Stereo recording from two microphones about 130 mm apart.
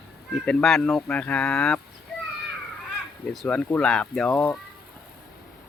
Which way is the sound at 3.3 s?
5° left (ahead or behind).